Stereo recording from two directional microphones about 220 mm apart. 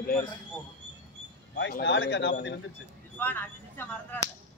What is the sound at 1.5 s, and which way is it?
Speech, 50° left (ahead or behind).